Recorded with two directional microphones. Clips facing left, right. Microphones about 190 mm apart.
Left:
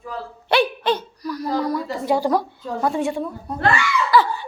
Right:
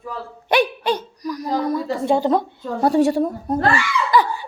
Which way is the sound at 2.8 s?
40° right (ahead or behind).